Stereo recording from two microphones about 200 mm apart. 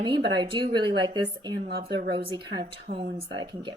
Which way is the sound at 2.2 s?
25° right (ahead or behind).